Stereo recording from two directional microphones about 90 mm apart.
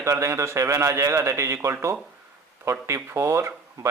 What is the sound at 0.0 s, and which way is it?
A man's voice, 35° right (ahead or behind).